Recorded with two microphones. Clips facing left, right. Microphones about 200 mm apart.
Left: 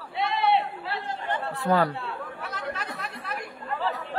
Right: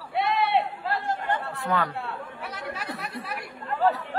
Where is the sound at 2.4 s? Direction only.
10° right (ahead or behind).